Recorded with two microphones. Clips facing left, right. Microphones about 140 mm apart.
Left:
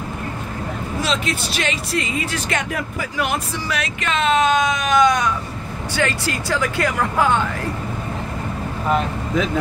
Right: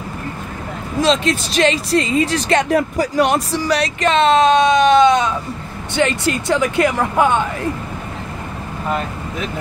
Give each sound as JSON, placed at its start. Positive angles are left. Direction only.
{"t": 1.0, "sound": "speech", "side_deg": -35}